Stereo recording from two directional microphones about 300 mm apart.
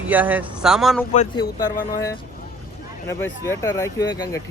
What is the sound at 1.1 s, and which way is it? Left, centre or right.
Speech, left.